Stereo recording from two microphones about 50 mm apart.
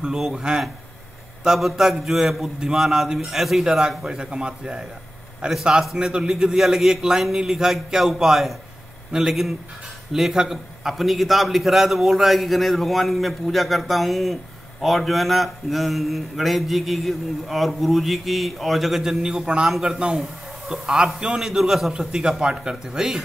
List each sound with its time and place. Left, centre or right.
0.0 s a man's voice: centre